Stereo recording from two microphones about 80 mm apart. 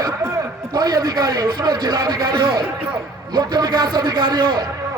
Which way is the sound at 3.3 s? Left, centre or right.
Right.